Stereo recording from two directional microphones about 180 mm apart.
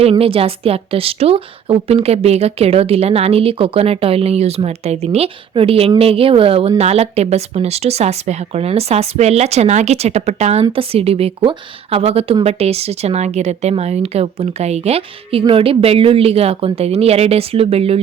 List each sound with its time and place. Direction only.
0.0 s speech: 30° right (ahead or behind)